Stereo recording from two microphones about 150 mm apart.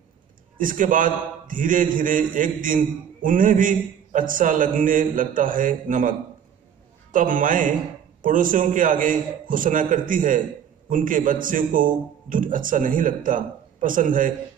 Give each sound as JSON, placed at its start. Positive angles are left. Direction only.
{"t": 0.6, "sound": "a man's voice", "side_deg": -65}